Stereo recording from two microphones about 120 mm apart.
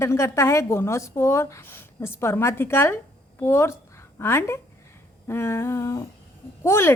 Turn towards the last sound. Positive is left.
turn(degrees=20)  # may be behind; listen again after turning